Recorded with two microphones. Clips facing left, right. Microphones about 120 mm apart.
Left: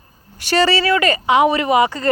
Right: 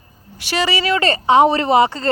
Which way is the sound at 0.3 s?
5° right (ahead or behind).